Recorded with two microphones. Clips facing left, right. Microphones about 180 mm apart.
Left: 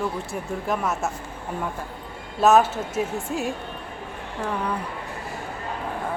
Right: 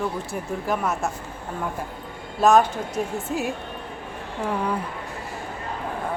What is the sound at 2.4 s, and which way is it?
Speech, 5° left (ahead or behind).